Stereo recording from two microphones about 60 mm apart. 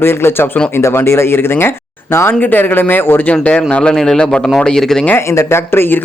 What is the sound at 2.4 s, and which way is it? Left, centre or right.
Speech, left.